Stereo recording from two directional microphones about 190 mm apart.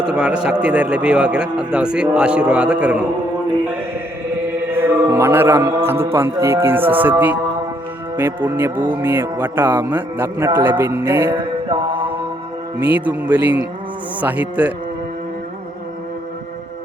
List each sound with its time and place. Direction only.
0.0 s speech: 5° right (ahead or behind)
4.7 s music: 10° right (ahead or behind)
5.8 s speech: 10° right (ahead or behind)
11.7 s mantra: 25° right (ahead or behind)
12.9 s speech: 10° right (ahead or behind)